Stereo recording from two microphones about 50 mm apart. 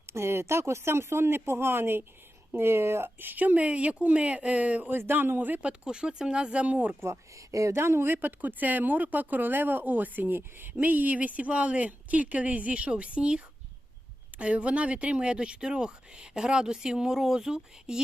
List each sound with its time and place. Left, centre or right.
0.1 s speech: right
2.6 s speech: right
3.2 s speech: right
4.9 s a man's voice: right
5.6 s speech: centre
7.0 s speech: right; by 18.0 s centre